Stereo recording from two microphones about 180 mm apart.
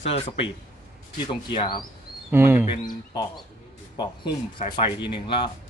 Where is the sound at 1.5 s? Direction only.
25° left (ahead or behind).